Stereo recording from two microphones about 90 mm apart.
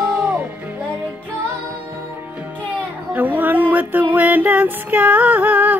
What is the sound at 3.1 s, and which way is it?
Female singing, 20° right (ahead or behind).